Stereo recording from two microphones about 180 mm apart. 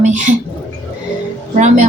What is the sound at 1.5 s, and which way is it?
Speech, 45° right (ahead or behind).